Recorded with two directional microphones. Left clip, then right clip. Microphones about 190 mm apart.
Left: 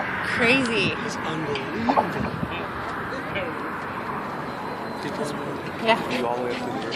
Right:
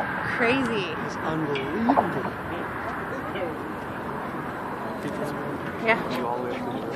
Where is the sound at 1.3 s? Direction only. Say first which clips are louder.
Right 3 dB; 30° right (ahead or behind).